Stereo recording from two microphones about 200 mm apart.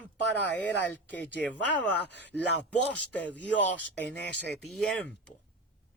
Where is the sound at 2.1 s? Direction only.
60° left (ahead or behind).